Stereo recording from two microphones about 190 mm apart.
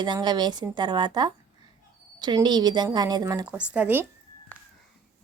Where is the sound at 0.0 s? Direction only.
25° right (ahead or behind).